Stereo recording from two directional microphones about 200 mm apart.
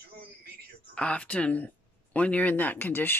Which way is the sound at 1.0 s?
5° left (ahead or behind).